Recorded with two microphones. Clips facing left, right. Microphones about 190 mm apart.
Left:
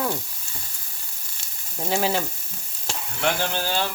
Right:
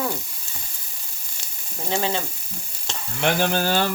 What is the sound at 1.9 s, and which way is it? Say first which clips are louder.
Frying: left 1 dB; 10° left (ahead or behind).